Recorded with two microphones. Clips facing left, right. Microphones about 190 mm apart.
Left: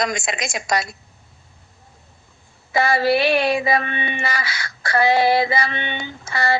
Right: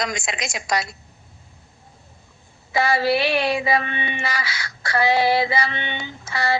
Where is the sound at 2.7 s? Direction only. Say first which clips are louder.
Left 2 dB; 50° left (ahead or behind).